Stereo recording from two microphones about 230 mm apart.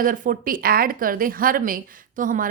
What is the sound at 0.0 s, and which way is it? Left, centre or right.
A woman's voice, right.